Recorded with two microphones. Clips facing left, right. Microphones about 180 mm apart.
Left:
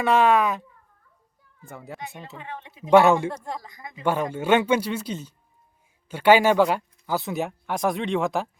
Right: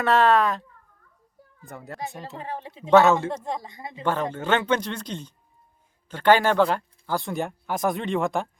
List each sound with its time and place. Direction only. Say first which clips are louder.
0.0 s speech: even; 10° left (ahead or behind)
1.7 s speech: right 2 dB; centre (ahead or behind)
2.4 s speech: right 5 dB; 35° right (ahead or behind)
2.9 s speech: left 1 dB; 15° left (ahead or behind)
3.4 s speech: right 3 dB; 25° right (ahead or behind)
4.0 s speech: left 2 dB; 10° left (ahead or behind)